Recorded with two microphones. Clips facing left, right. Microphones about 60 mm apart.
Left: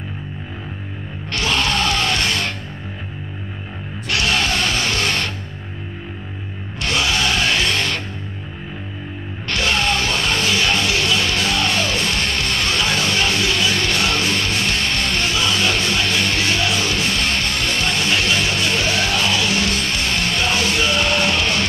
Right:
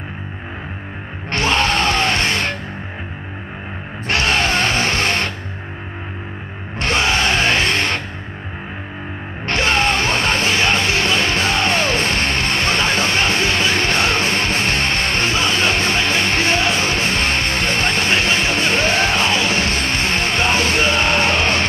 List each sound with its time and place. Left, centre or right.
1.3 s music: right
4.1 s music: right
6.8 s music: right
9.5 s music: right